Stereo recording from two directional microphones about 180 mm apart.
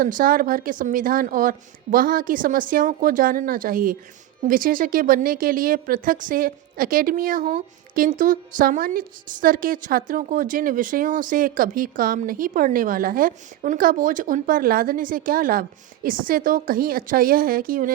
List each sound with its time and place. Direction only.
0.0 s speech: 50° right (ahead or behind)